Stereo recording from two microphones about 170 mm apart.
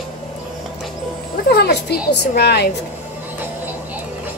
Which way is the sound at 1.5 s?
75° left (ahead or behind).